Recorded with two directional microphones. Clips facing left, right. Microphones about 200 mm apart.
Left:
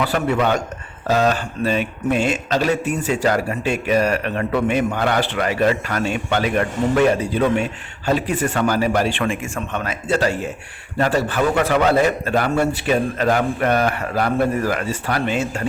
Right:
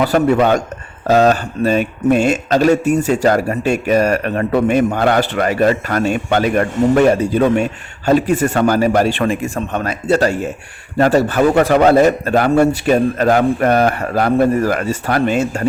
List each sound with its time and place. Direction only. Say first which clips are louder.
0.0 s a man's voice: right 6 dB; 40° right (ahead or behind)